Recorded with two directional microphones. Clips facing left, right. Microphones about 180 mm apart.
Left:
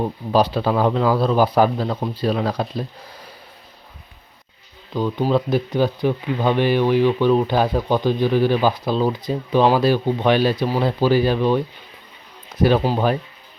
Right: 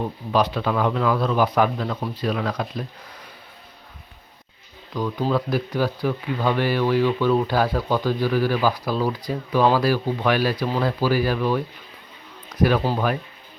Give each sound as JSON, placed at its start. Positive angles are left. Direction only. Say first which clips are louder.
{"t": 0.0, "sound": "a man's voice", "louder": "left 3 dB", "side_deg": 35}
{"t": 4.9, "sound": "speech", "louder": "left 4 dB", "side_deg": 25}